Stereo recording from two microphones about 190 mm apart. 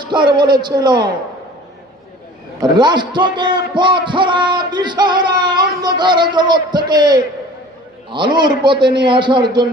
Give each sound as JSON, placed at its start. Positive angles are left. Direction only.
{"t": 0.0, "sound": "a man's voice", "side_deg": -25}
{"t": 2.6, "sound": "a man's voice", "side_deg": -25}